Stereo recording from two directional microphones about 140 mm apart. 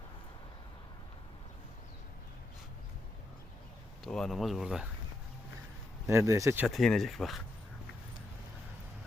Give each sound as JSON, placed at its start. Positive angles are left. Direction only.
{"t": 4.0, "sound": "speech", "side_deg": 0}
{"t": 6.1, "sound": "speech", "side_deg": -20}
{"t": 6.7, "sound": "speech", "side_deg": 0}